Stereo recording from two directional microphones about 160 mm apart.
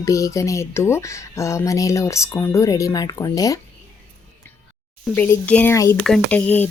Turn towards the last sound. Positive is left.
turn(degrees=10)  # may be behind; listen again after turning